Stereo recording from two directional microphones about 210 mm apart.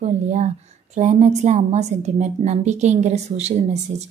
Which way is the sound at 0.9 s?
35° right (ahead or behind).